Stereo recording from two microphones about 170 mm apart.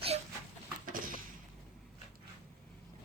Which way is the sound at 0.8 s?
55° right (ahead or behind).